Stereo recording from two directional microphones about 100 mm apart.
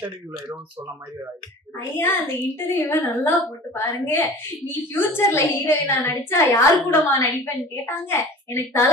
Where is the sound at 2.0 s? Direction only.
20° left (ahead or behind).